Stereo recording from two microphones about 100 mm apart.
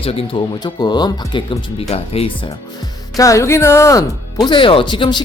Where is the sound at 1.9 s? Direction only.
80° left.